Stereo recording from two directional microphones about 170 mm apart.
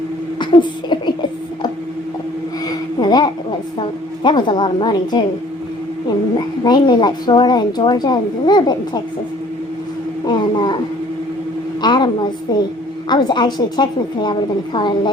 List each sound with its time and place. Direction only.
0.3 s a sound: 25° left (ahead or behind)
3.8 s a woman's voice: 25° left (ahead or behind)
6.7 s a woman's voice: 25° left (ahead or behind)
10.2 s a woman's voice: 25° left (ahead or behind)
11.8 s a woman's voice: 25° left (ahead or behind)